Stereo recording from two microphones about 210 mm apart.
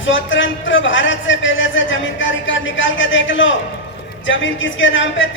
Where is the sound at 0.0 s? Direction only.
65° left (ahead or behind).